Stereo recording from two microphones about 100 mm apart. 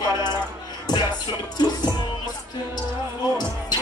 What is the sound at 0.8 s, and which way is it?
Music, 45° left (ahead or behind).